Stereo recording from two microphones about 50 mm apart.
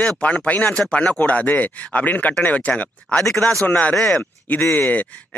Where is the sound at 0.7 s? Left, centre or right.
Centre.